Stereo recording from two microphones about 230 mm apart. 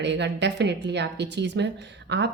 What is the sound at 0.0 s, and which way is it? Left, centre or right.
Speech, right.